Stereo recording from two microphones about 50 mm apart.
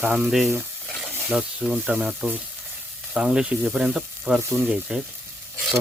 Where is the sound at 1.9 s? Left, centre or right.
Right.